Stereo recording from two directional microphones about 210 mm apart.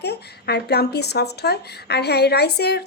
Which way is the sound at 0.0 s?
50° left (ahead or behind).